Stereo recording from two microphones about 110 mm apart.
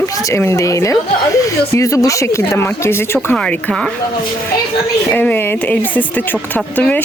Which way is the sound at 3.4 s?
5° left (ahead or behind).